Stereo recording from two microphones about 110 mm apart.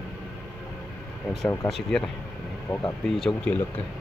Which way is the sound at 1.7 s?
5° left (ahead or behind).